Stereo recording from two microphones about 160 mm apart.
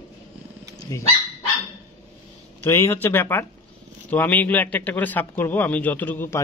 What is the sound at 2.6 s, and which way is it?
A man's voice, 15° left (ahead or behind).